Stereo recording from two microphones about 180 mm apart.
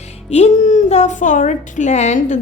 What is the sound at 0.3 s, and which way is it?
A woman's voice, 40° left (ahead or behind).